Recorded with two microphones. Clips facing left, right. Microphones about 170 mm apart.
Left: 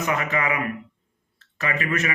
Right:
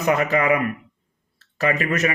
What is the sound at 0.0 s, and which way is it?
Speech, 35° right (ahead or behind).